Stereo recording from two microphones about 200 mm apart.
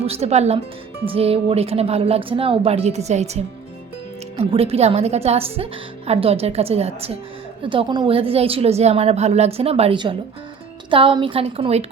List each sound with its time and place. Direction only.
0.0 s a woman's voice: 30° right (ahead or behind)